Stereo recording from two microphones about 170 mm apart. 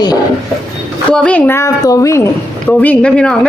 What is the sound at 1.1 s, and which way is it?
A woman's voice, 10° left (ahead or behind).